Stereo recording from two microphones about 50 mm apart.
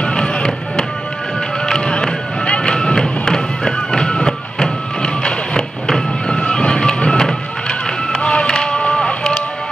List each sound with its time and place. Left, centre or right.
0.0 s music: centre